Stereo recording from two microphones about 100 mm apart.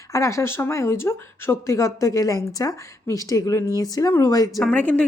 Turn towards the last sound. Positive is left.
turn(degrees=15)  # may be behind; listen again after turning